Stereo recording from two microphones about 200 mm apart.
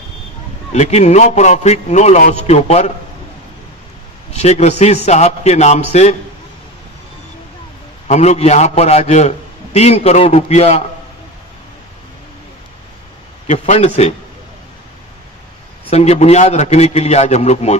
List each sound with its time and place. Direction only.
0.7 s a man's voice: 35° left (ahead or behind)
4.4 s a man's voice: 35° left (ahead or behind)
8.1 s a man's voice: 35° left (ahead or behind)
13.5 s a man's voice: 35° left (ahead or behind)
15.9 s a man's voice: 35° left (ahead or behind)